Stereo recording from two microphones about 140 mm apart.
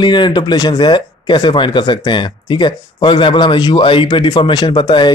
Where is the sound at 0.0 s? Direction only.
35° left (ahead or behind).